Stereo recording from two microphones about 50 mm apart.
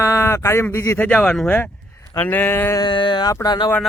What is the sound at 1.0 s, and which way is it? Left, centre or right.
Speech, left.